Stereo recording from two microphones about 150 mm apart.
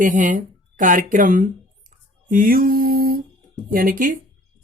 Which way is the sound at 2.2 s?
65° right (ahead or behind).